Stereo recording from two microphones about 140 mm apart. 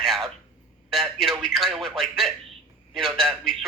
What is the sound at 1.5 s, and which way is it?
Speech, centre (ahead or behind).